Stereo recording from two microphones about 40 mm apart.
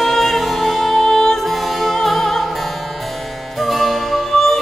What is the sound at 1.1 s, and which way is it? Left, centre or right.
Music, centre.